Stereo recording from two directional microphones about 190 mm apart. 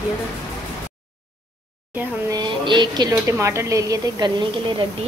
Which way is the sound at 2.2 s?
25° right (ahead or behind).